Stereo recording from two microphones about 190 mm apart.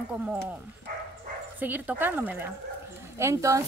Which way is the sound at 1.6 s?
10° right (ahead or behind).